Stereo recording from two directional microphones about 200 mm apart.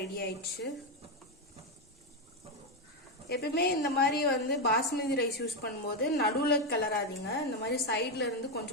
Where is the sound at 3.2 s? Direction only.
55° left (ahead or behind).